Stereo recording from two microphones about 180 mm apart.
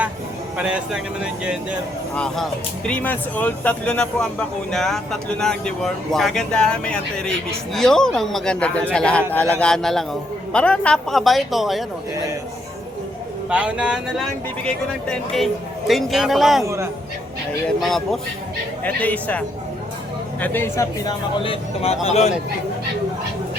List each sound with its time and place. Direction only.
0.5 s speech: 5° right (ahead or behind)
13.5 s speech: 5° right (ahead or behind)
16.6 s a man's voice: 15° right (ahead or behind)
17.7 s speech: centre (ahead or behind); by 22.3 s 35° left (ahead or behind)